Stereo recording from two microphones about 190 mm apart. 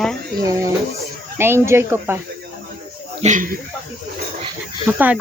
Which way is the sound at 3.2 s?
45° right (ahead or behind).